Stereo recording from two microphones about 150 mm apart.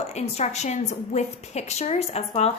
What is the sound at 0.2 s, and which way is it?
A woman's voice, 50° left (ahead or behind).